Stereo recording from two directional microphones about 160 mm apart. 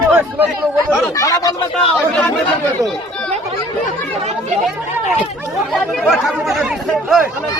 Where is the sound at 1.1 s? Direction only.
20° left (ahead or behind).